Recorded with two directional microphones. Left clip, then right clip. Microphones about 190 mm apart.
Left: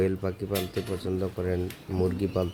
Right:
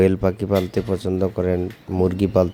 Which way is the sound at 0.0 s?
45° right (ahead or behind).